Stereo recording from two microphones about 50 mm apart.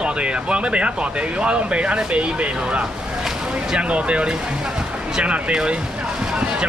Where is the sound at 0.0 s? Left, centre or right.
Right.